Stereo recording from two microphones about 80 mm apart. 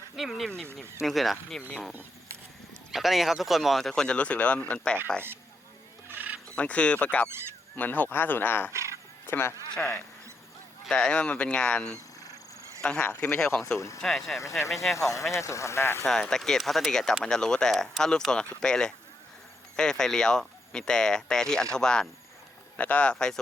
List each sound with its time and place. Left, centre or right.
0.2 s speech: centre
2.9 s speech: centre
6.1 s wild animals: right
6.6 s speech: centre
8.7 s a sound: right
9.2 s speech: left
13.4 s speech: centre
13.7 s speech: left
14.0 s speech: centre
14.9 s speech: left
16.0 s speech: centre